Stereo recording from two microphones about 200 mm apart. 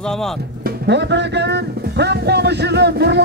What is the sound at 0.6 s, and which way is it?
Music, 60° right (ahead or behind).